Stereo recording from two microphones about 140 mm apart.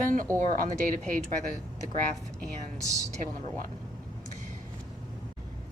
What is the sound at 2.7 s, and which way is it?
Speech, 25° right (ahead or behind).